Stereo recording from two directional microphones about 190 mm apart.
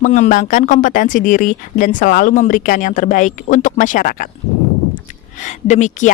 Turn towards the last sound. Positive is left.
turn(degrees=40)  # may be behind; listen again after turning